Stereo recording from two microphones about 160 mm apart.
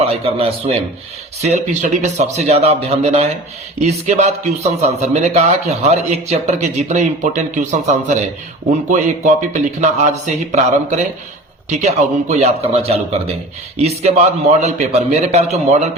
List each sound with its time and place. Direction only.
0.0 s a man's voice: 35° right (ahead or behind)